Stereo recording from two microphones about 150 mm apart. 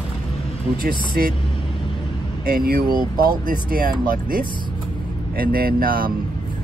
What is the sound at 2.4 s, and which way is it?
Speech, 85° right.